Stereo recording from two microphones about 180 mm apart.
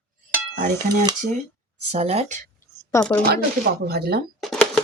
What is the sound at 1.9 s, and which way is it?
Speech, 35° right (ahead or behind).